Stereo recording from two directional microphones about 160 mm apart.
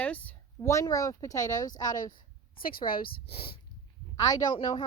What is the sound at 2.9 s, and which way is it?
Speech, 65° left (ahead or behind).